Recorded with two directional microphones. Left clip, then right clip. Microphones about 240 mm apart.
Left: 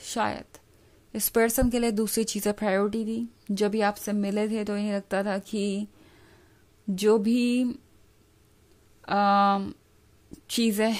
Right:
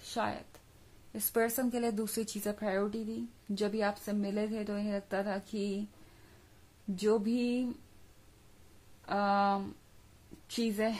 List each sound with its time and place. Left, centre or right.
0.0 s speech: left
7.0 s speech: left
9.0 s speech: left